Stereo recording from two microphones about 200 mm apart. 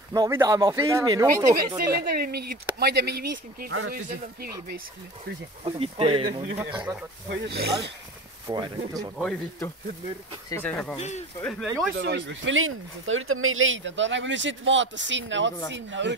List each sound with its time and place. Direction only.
0.1 s speech: 20° right (ahead or behind)
1.9 s speech: 50° right (ahead or behind)
5.6 s speech: 30° right (ahead or behind)
6.8 s speech: 5° right (ahead or behind)
7.2 s speech: 55° right (ahead or behind)
8.5 s speech: 20° right (ahead or behind)
10.5 s speech: 5° left (ahead or behind)
11.0 s speech: 35° left (ahead or behind)
11.4 s speech: centre (ahead or behind)
12.0 s speech: 60° right (ahead or behind)